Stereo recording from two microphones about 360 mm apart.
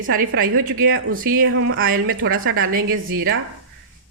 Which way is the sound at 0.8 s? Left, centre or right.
Right.